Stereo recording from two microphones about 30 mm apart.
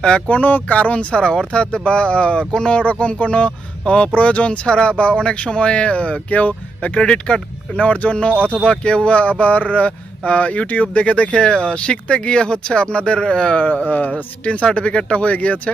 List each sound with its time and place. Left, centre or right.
0.3 s speech: left
0.7 s speech: left
1.1 s speech: left
7.0 s speech: left
13.6 s speech: left
14.4 s speech: left